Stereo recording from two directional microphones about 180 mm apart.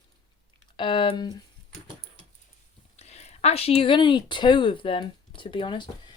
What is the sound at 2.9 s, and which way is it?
A woman's voice, 35° left (ahead or behind).